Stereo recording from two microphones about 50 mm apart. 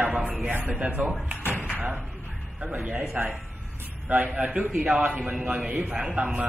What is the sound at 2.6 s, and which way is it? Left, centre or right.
Speech, right.